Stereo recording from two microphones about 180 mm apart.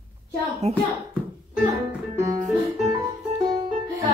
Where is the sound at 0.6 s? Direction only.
35° right (ahead or behind).